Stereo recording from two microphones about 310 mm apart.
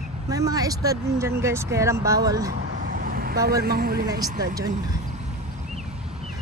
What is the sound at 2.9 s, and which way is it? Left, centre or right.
Speech, right.